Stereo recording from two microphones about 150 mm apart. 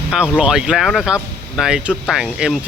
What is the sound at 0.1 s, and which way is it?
Speech, 5° right (ahead or behind).